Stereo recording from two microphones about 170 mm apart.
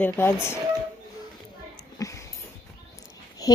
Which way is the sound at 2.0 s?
20° left (ahead or behind).